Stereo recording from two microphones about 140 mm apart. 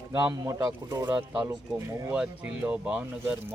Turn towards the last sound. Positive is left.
turn(degrees=-5)  # may be behind; listen again after turning